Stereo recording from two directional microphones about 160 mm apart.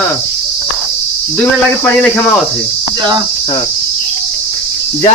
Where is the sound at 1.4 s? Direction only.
10° left (ahead or behind).